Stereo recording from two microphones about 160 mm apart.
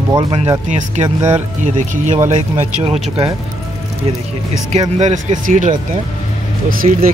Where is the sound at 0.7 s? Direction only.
50° right (ahead or behind).